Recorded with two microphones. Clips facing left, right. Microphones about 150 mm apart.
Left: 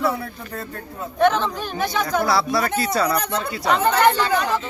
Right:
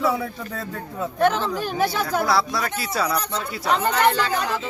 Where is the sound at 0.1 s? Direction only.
90° right.